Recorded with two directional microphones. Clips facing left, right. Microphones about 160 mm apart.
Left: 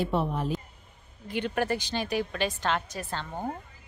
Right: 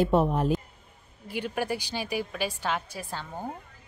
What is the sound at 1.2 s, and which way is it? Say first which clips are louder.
A woman's voice: left 2 dB; 10° right (ahead or behind).